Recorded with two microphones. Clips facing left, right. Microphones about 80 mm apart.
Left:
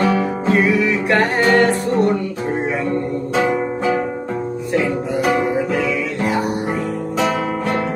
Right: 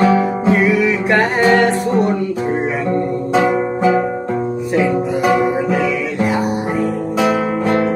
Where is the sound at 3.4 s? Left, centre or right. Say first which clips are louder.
Right 3 dB; centre.